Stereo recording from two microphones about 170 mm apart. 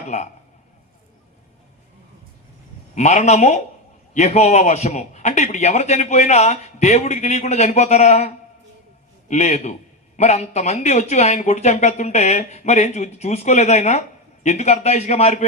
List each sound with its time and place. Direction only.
0.1 s a man's voice: 40° left (ahead or behind)
2.9 s a man's voice: 40° left (ahead or behind)
9.3 s a man's voice: 40° left (ahead or behind)